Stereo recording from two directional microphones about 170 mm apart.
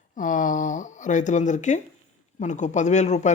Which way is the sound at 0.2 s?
50° left (ahead or behind).